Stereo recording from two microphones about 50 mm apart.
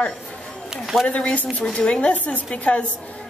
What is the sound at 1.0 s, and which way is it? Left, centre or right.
A woman's voice, left.